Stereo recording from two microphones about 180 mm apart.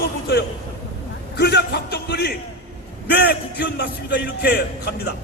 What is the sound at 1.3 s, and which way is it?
A man's voice, 65° left (ahead or behind).